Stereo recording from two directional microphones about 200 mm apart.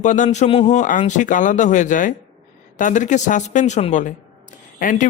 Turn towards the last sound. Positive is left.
turn(degrees=40)  # may be behind; listen again after turning